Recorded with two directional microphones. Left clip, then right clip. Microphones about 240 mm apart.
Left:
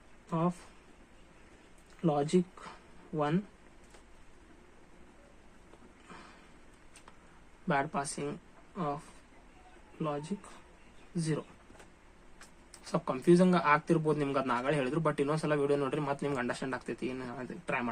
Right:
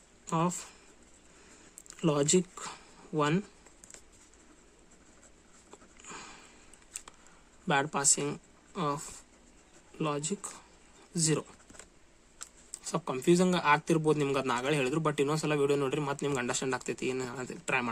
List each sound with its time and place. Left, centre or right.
0.3 s speech: right
2.0 s speech: right
7.7 s speech: right
10.0 s speech: right
12.7 s speech: right